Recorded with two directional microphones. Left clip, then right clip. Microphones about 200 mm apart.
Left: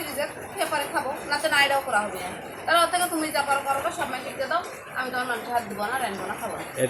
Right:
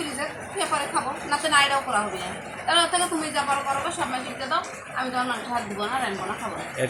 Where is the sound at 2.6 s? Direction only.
20° left (ahead or behind).